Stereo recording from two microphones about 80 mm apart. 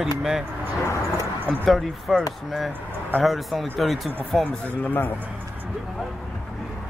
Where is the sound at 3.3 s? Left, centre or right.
Centre.